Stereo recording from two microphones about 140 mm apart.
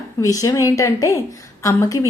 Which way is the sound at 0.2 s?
25° left (ahead or behind).